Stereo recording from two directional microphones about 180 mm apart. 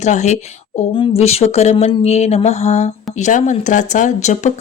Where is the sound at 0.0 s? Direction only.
40° left (ahead or behind).